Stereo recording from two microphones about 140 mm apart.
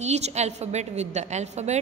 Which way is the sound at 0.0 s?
55° right (ahead or behind).